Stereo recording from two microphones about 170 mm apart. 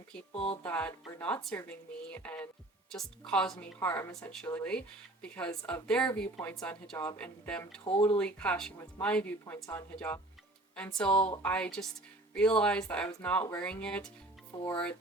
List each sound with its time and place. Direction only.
0.3 s speech: 35° left (ahead or behind)
0.6 s speech: 10° left (ahead or behind)